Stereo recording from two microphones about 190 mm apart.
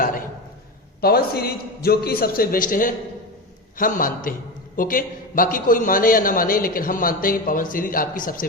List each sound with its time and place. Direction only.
1.0 s a man's voice: 55° left (ahead or behind)